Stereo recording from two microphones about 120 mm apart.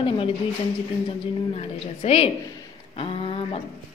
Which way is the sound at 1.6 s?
55° left (ahead or behind).